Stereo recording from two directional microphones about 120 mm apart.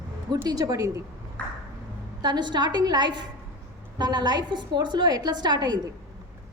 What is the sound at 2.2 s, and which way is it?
A woman's voice, 40° right (ahead or behind).